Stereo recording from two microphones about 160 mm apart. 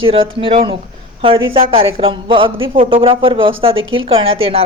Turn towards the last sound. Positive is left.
turn(degrees=-35)  # may be behind; listen again after turning